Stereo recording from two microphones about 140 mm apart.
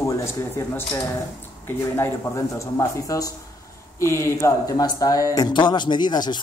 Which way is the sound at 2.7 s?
25° left (ahead or behind).